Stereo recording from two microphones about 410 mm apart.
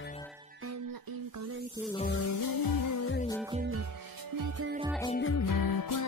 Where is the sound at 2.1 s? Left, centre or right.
Left.